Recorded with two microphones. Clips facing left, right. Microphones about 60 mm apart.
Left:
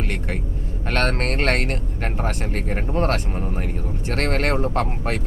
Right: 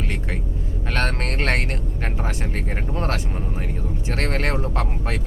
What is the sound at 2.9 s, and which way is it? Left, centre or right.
Speech, left.